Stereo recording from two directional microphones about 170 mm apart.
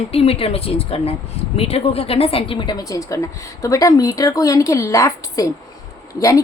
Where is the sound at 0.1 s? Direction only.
35° left (ahead or behind).